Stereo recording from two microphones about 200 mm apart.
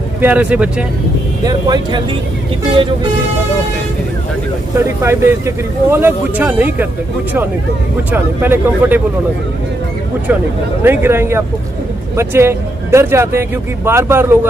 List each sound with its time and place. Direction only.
0.2 s speech: 5° right (ahead or behind)
1.4 s speech: 20° right (ahead or behind)
4.7 s speech: 15° right (ahead or behind)
8.1 s speech: 10° right (ahead or behind)
10.8 s speech: 10° right (ahead or behind)